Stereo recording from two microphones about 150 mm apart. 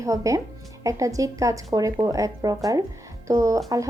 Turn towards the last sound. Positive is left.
turn(degrees=-20)  # may be behind; listen again after turning